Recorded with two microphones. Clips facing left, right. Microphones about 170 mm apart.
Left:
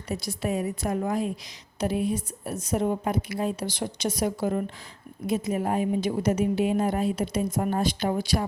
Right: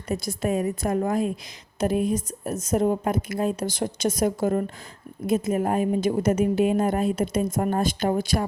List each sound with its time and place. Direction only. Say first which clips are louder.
0.1 s a woman's voice: right 3 dB; 50° right (ahead or behind)